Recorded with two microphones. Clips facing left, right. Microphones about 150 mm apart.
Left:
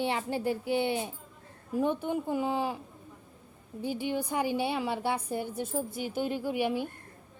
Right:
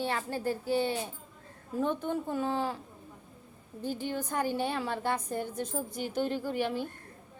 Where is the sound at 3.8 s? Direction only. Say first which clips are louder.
Left 2 dB; 10° left (ahead or behind).